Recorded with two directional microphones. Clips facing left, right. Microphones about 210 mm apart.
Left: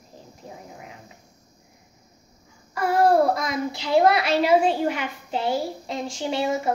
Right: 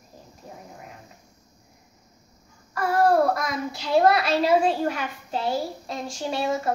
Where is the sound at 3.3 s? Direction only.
25° left (ahead or behind).